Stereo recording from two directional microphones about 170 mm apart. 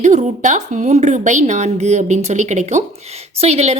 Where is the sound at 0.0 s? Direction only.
45° right (ahead or behind).